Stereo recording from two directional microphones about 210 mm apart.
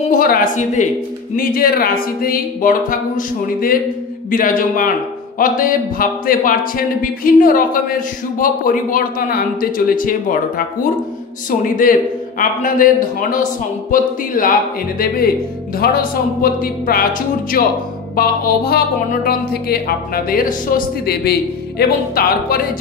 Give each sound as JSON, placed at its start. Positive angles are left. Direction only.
{"t": 0.1, "sound": "speech", "side_deg": 40}
{"t": 20.2, "sound": "speech", "side_deg": 40}